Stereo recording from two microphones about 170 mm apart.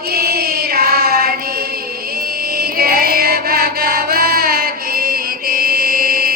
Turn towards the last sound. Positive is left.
turn(degrees=-60)  # may be behind; listen again after turning